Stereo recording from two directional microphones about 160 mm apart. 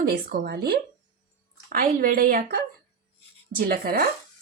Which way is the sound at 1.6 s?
60° right (ahead or behind).